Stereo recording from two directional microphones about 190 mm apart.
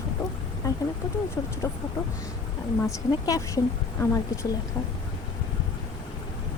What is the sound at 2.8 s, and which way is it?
Speech, 20° left (ahead or behind).